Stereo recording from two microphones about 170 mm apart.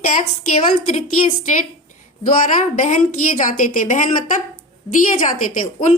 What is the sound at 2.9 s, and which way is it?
A woman's voice, 45° left (ahead or behind).